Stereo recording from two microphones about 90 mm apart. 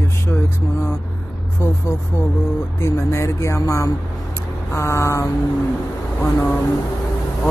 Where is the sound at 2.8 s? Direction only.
30° left (ahead or behind).